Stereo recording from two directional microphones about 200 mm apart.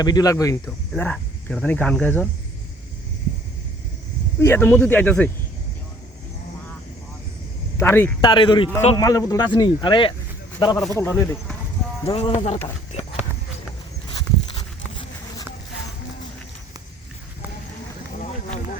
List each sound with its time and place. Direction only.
0.0 s speech: 20° left (ahead or behind)
4.4 s speech: 10° left (ahead or behind)
7.8 s speech: 10° left (ahead or behind)
8.2 s speech: 25° left (ahead or behind)
9.0 s speech: 15° left (ahead or behind)
10.9 s speech: 10° left (ahead or behind)
12.0 s speech: 30° left (ahead or behind)